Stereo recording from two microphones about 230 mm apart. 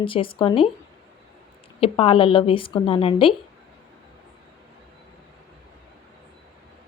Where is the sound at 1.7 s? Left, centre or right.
Left.